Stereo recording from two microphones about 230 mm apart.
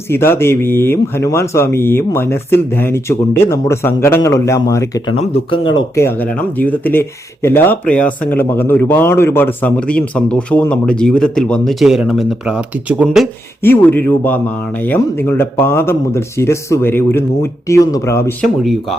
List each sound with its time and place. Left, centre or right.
0.1 s speech: centre
5.2 s speech: left
6.0 s speech: centre
13.6 s speech: centre